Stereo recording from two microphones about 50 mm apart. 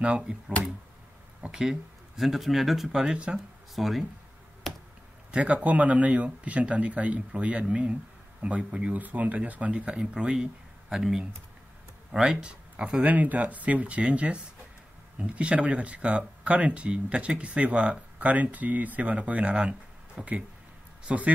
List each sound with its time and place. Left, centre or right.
0.0 s speech: centre
1.6 s speech: centre
4.7 s a sound: centre
5.3 s speech: right
8.9 s speech: right; by 11.1 s centre
12.1 s speech: centre
21.1 s speech: centre